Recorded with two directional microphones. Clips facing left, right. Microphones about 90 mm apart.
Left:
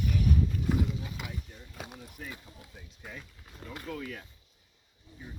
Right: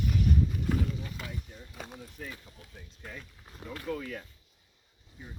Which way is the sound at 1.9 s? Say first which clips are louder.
Right 1 dB; 10° left (ahead or behind).